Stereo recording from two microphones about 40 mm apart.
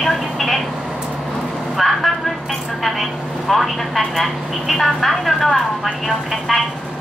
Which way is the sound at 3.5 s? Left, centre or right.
Centre.